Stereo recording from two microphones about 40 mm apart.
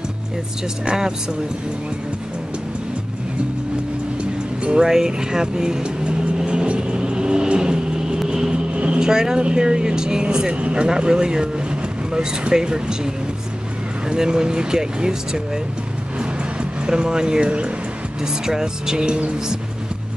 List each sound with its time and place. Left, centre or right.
4.2 s music: right
4.8 s vehicle: centre
9.0 s speech: centre
16.8 s speech: centre
18.2 s speech: centre